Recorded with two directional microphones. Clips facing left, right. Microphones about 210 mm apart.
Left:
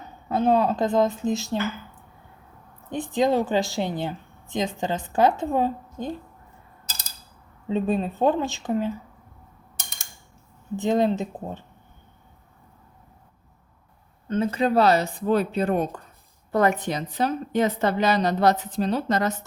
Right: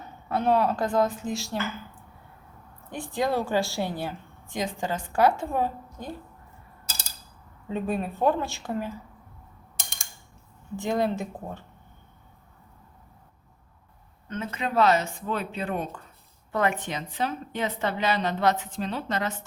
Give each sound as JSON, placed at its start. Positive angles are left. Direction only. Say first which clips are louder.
{"t": 0.3, "sound": "a woman's voice", "louder": "left 3 dB", "side_deg": 20}
{"t": 2.9, "sound": "a woman's voice", "louder": "left 5 dB", "side_deg": 20}
{"t": 7.7, "sound": "a woman's voice", "louder": "left 5 dB", "side_deg": 20}
{"t": 10.8, "sound": "a woman's voice", "louder": "left 5 dB", "side_deg": 20}
{"t": 14.3, "sound": "a woman's voice", "louder": "left 9 dB", "side_deg": 35}